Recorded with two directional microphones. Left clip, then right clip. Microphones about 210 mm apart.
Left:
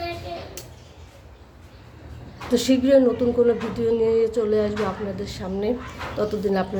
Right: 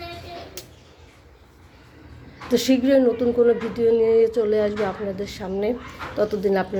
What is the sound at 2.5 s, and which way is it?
A woman's voice, 15° right (ahead or behind).